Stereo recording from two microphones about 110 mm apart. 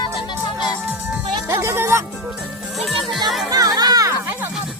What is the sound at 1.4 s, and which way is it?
Music, 25° right (ahead or behind).